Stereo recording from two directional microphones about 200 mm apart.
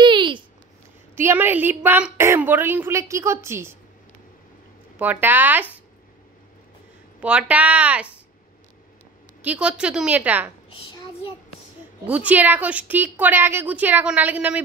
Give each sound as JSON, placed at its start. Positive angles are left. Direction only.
{"t": 0.0, "sound": "a sound", "side_deg": -25}
{"t": 1.1, "sound": "a woman's voice", "side_deg": -10}
{"t": 4.9, "sound": "a woman's voice", "side_deg": -10}
{"t": 7.2, "sound": "a woman's voice", "side_deg": -5}
{"t": 9.4, "sound": "a woman's voice", "side_deg": -5}
{"t": 12.1, "sound": "a woman's voice", "side_deg": -10}